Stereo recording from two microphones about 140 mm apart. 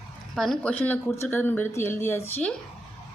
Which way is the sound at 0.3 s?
5° left (ahead or behind).